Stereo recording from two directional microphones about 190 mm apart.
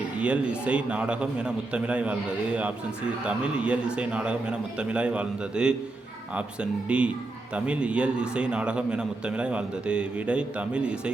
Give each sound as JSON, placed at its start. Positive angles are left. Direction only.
{"t": 0.2, "sound": "a man's voice", "side_deg": -5}